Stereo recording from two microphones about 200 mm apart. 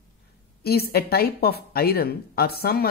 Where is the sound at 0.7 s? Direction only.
50° left (ahead or behind).